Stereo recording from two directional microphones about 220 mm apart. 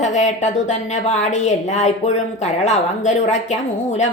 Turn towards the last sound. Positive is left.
turn(degrees=30)  # may be behind; listen again after turning